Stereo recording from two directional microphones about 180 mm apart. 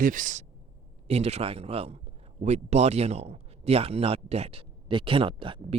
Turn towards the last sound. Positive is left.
turn(degrees=-30)  # may be behind; listen again after turning